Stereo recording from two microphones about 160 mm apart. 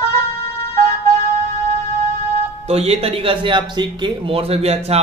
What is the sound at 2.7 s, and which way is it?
Speech, 40° right (ahead or behind).